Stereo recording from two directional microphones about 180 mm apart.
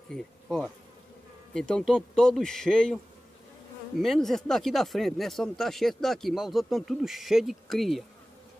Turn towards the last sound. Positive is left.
turn(degrees=0)  # may be behind; listen again after turning